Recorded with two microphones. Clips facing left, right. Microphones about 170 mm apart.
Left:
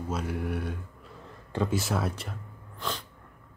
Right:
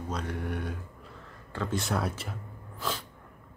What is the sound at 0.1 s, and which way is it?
Speech, 5° left (ahead or behind).